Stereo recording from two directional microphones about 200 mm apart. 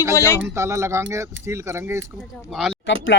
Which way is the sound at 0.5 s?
15° right (ahead or behind).